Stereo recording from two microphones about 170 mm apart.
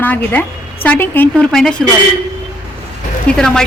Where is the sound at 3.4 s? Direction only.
5° left (ahead or behind).